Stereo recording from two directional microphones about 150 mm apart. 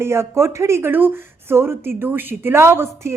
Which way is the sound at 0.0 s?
15° right (ahead or behind).